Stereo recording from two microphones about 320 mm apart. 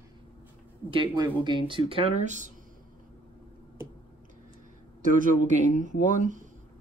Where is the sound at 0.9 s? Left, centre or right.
Centre.